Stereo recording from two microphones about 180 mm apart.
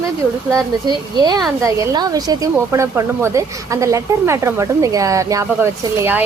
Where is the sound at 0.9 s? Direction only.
25° right (ahead or behind).